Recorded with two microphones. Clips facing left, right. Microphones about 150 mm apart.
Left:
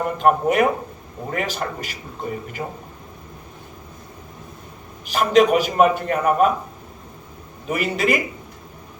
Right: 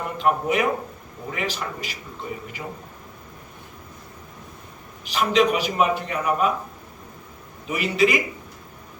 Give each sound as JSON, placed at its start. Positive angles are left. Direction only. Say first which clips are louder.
{"t": 0.2, "sound": "a man's voice", "louder": "left 4 dB", "side_deg": 50}
{"t": 5.0, "sound": "a man's voice", "louder": "left 4 dB", "side_deg": 45}
{"t": 7.7, "sound": "a man's voice", "louder": "even", "side_deg": 50}